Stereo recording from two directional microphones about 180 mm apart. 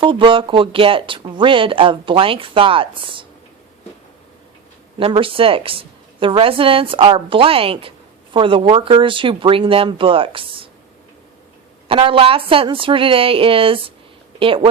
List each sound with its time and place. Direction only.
0.0 s a woman's voice: 30° right (ahead or behind)
4.9 s a woman's voice: 30° right (ahead or behind)
11.9 s a woman's voice: 30° right (ahead or behind)